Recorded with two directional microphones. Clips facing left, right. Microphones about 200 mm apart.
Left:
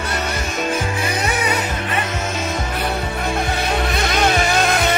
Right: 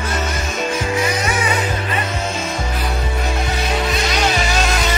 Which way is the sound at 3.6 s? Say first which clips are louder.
Even; 60° left (ahead or behind).